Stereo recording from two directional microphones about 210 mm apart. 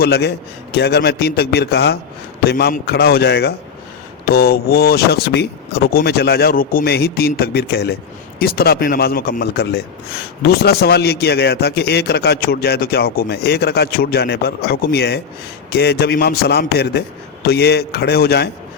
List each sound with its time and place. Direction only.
0.0 s a man's voice: 50° left (ahead or behind)